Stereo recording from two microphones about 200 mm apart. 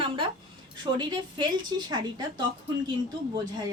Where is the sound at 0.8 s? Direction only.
20° right (ahead or behind).